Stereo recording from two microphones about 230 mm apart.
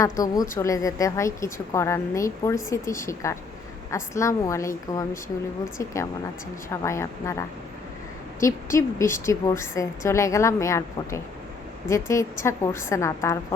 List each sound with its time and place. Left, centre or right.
0.0 s a woman's voice: centre